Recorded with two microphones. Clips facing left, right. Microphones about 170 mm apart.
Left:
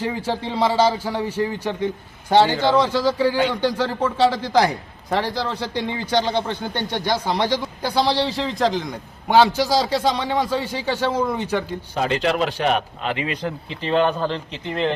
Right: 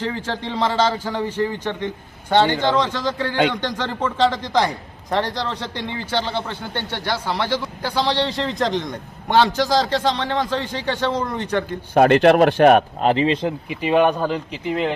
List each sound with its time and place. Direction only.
0.0 s speech: 10° left (ahead or behind)
11.9 s a man's voice: 60° right (ahead or behind); by 13.2 s 40° right (ahead or behind)
13.2 s speech: 25° right (ahead or behind)
13.7 s speech: 15° right (ahead or behind)